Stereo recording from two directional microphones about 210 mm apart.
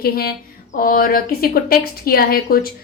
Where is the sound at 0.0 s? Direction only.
45° left (ahead or behind).